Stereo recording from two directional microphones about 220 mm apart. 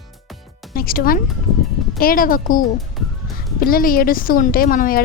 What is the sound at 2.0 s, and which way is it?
A woman's voice, 40° left (ahead or behind).